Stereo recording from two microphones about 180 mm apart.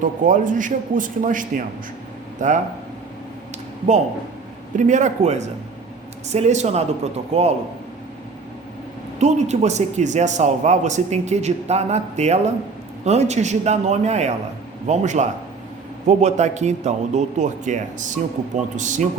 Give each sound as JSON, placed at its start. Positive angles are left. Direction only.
{"t": 0.0, "sound": "a man's voice", "side_deg": -45}
{"t": 4.8, "sound": "a man's voice", "side_deg": -40}
{"t": 9.1, "sound": "a man's voice", "side_deg": -40}